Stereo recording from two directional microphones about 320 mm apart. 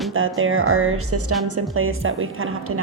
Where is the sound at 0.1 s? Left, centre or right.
Right.